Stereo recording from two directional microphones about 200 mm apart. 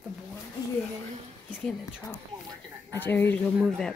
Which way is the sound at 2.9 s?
10° left (ahead or behind).